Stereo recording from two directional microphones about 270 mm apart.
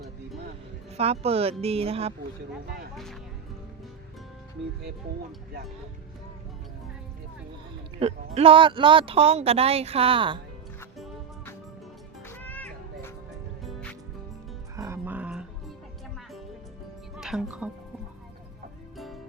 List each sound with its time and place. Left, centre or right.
0.9 s a woman's voice: right
2.9 s speech: centre
7.9 s a woman's voice: right
10.8 s music: centre
14.8 s music: centre
17.2 s speech: centre
18.9 s music: centre